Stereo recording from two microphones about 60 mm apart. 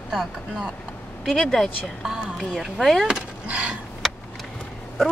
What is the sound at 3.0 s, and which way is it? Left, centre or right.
Speech, centre.